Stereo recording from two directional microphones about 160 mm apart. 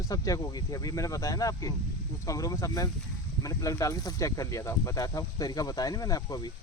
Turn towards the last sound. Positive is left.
turn(degrees=25)  # may be behind; listen again after turning